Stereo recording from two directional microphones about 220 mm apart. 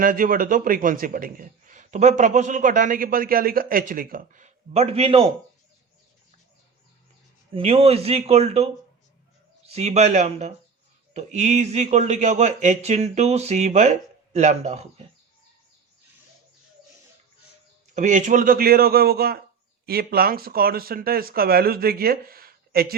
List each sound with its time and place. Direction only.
0.0 s a man's voice: 40° right (ahead or behind)
7.5 s a man's voice: 25° right (ahead or behind)
17.9 s speech: 35° right (ahead or behind)